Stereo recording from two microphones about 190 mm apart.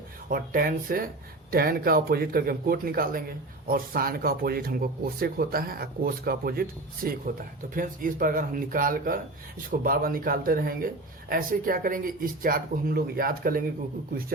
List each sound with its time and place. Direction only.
0.3 s speech: 50° right (ahead or behind)